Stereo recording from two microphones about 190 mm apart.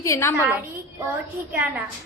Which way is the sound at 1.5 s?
10° right (ahead or behind).